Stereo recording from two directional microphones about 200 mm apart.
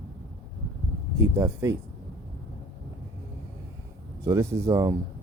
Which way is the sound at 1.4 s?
15° right (ahead or behind).